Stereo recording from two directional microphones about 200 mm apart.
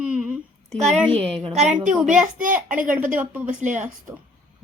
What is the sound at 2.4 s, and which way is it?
A woman's voice, 40° right (ahead or behind).